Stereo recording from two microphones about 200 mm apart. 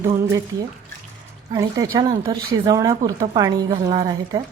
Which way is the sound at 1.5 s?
20° right (ahead or behind).